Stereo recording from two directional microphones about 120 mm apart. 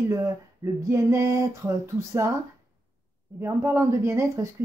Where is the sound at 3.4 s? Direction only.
20° right (ahead or behind).